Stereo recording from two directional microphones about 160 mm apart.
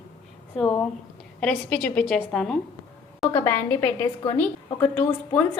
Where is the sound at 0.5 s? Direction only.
5° left (ahead or behind).